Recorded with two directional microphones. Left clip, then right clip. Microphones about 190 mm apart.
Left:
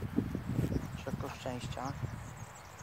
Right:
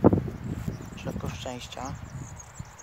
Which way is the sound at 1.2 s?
35° right (ahead or behind).